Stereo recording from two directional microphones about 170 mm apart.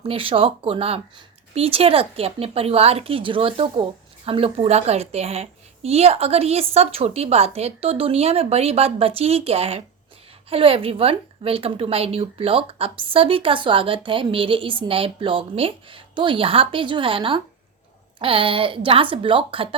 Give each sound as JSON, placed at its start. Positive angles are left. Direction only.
{"t": 0.0, "sound": "a woman's voice", "side_deg": -35}